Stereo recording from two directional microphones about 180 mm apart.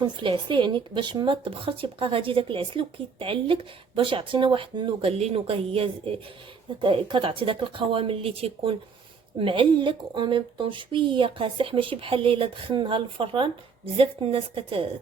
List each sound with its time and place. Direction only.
0.0 s speech: 25° right (ahead or behind)